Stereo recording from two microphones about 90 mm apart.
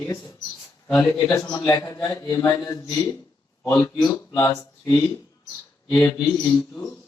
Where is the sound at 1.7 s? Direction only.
40° left (ahead or behind).